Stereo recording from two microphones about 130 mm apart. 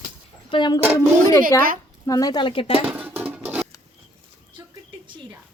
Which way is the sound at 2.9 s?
15° right (ahead or behind).